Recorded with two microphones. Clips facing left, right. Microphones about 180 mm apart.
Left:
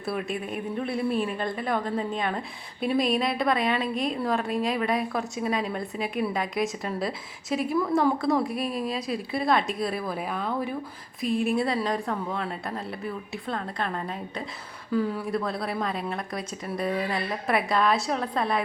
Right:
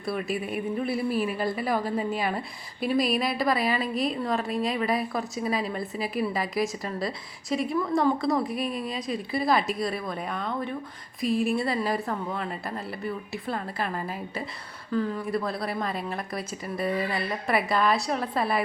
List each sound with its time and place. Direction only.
0.0 s a woman's voice: centre (ahead or behind)
14.9 s a woman's voice: 5° left (ahead or behind)